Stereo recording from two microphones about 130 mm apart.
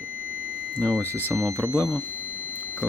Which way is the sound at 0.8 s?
15° left (ahead or behind).